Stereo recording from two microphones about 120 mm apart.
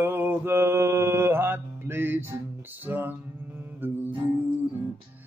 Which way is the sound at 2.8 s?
15° right (ahead or behind).